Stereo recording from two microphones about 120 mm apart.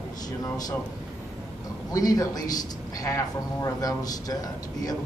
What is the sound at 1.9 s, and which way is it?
A man's voice, 30° left (ahead or behind).